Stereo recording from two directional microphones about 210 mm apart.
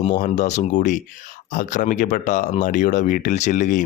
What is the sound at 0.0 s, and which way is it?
Speech, 35° left (ahead or behind).